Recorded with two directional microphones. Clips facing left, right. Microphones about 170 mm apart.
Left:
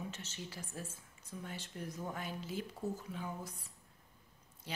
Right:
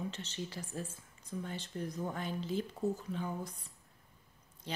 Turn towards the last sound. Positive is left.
turn(degrees=5)  # may be behind; listen again after turning